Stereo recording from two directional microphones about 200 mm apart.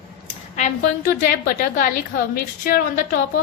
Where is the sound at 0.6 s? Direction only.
40° left (ahead or behind).